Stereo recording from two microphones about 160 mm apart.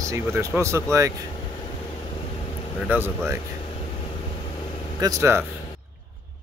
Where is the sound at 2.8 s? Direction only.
15° right (ahead or behind).